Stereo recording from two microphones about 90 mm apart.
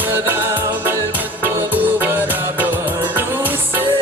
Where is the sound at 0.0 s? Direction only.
25° right (ahead or behind).